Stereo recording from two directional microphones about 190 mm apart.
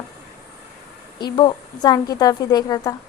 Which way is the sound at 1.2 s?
25° left (ahead or behind).